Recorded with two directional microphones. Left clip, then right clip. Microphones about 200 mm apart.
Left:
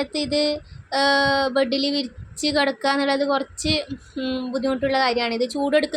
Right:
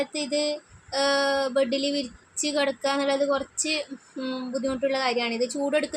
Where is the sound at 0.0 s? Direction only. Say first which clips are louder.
Left 4 dB; 15° left (ahead or behind).